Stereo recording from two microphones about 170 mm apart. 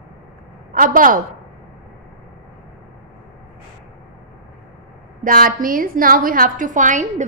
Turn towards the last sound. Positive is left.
turn(degrees=-45)  # may be behind; listen again after turning